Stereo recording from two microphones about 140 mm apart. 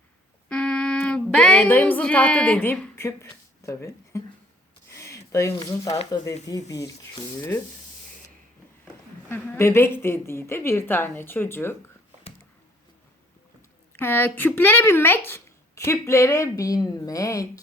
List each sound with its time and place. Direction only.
0.4 s speech: 5° left (ahead or behind)
2.9 s speech: 20° left (ahead or behind)
4.9 s a sound: 20° left (ahead or behind)
6.4 s speech: 25° left (ahead or behind)
9.3 s a woman's voice: 15° left (ahead or behind)
13.9 s speech: 15° left (ahead or behind)